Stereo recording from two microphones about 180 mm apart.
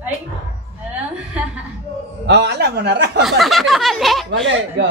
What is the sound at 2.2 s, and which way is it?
Speech, 70° right (ahead or behind).